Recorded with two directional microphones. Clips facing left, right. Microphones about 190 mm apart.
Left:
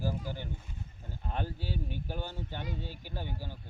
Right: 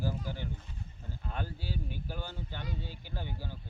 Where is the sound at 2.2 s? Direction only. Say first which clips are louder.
Left 2 dB; 15° left (ahead or behind).